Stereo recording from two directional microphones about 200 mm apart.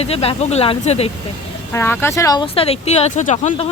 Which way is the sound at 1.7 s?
10° left (ahead or behind).